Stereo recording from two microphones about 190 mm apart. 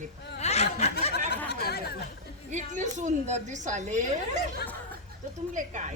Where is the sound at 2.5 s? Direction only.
40° right (ahead or behind).